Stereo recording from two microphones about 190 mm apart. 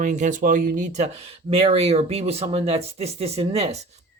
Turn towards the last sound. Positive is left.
turn(degrees=-30)  # may be behind; listen again after turning